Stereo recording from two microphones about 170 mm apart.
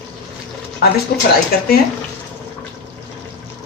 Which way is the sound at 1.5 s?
60° left (ahead or behind).